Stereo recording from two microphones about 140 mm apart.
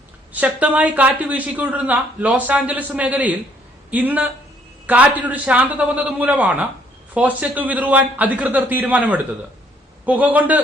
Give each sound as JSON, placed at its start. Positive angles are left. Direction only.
{"t": 0.3, "sound": "speech", "side_deg": -10}